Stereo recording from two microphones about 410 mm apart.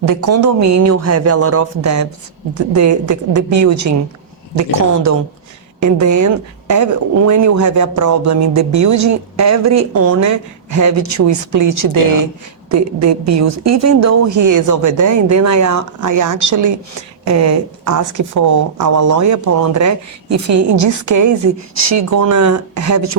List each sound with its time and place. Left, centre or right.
0.0 s speech: right
5.8 s speech: right